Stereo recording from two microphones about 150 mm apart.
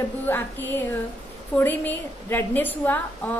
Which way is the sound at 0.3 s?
15° left (ahead or behind).